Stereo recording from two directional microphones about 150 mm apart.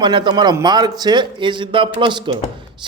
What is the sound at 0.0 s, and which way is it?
A man's voice, 30° right (ahead or behind).